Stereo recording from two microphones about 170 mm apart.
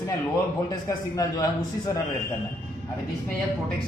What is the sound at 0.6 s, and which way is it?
A man's voice, 20° left (ahead or behind).